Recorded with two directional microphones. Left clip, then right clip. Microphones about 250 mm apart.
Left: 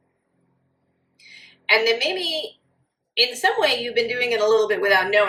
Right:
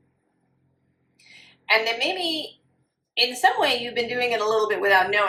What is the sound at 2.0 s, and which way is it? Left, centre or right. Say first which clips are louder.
A child's voice: left 2 dB; centre.